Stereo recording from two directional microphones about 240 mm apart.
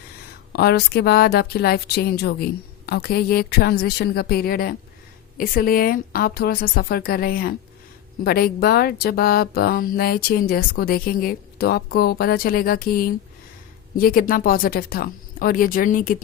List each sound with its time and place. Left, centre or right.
0.5 s speech: left